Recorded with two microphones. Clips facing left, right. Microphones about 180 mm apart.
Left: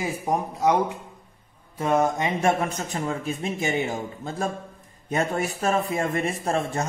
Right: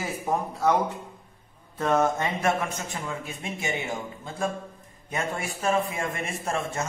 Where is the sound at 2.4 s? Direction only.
35° left (ahead or behind).